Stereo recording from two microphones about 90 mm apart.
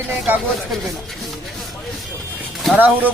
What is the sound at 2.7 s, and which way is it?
Speech, 20° right (ahead or behind).